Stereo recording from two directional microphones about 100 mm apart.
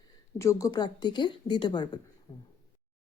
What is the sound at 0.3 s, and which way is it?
Speech, 30° left (ahead or behind).